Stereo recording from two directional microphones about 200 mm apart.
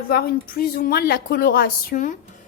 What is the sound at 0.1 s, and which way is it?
Speech, 45° left (ahead or behind).